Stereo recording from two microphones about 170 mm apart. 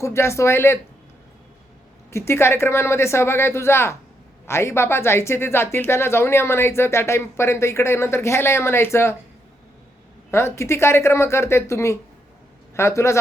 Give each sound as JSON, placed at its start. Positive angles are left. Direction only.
{"t": 0.0, "sound": "a woman's voice", "side_deg": 15}
{"t": 2.0, "sound": "a woman's voice", "side_deg": 15}
{"t": 10.3, "sound": "a woman's voice", "side_deg": 15}